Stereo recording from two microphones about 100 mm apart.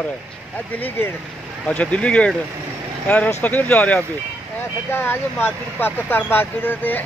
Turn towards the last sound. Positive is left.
turn(degrees=20)  # may be behind; listen again after turning